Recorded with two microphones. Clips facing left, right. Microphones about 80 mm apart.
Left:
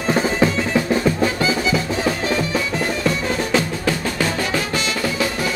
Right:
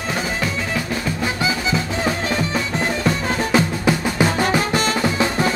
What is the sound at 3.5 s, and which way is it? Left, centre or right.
Drum, centre.